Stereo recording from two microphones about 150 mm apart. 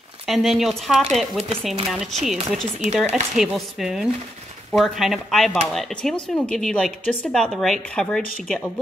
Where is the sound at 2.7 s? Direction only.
50° right (ahead or behind).